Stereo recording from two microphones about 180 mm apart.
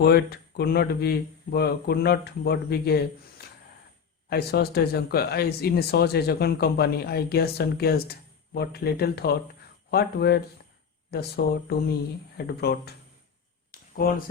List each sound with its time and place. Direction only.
0.0 s speech: 60° left (ahead or behind)
12.5 s speech: 65° left (ahead or behind)
13.7 s a sound: 55° left (ahead or behind)